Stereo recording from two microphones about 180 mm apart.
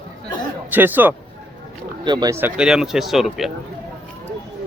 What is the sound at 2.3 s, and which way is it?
Speech, 10° right (ahead or behind).